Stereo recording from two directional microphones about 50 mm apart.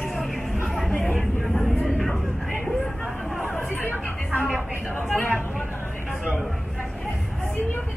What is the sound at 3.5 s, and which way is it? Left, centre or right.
Chatter, left.